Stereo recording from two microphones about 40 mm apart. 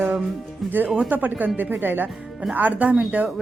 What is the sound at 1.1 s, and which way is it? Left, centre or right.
Speech, right.